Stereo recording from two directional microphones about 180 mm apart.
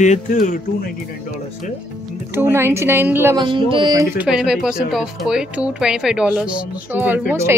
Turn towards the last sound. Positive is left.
turn(degrees=-10)  # may be behind; listen again after turning